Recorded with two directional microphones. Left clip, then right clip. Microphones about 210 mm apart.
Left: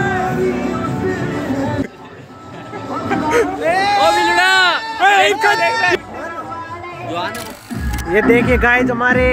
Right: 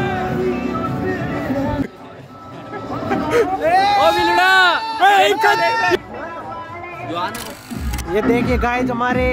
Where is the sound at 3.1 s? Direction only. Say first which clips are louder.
Left 2 dB; 10° right (ahead or behind).